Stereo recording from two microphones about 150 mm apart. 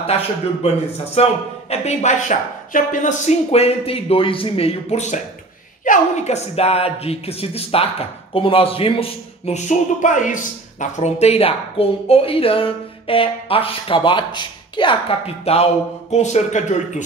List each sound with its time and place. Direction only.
0.0 s speech: 40° left (ahead or behind)
9.7 s speech: 55° left (ahead or behind)